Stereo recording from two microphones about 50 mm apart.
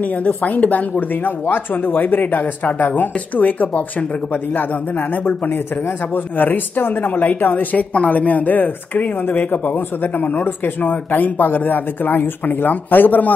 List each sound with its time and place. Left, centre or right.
0.0 s speech: left
7.9 s speech: left